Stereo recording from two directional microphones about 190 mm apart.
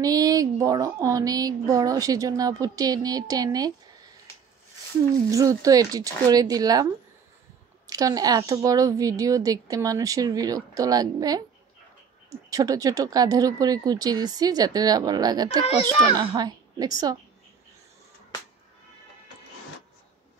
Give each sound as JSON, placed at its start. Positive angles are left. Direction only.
{"t": 0.0, "sound": "speech", "side_deg": -20}
{"t": 5.3, "sound": "speech", "side_deg": -15}
{"t": 12.4, "sound": "speech", "side_deg": -15}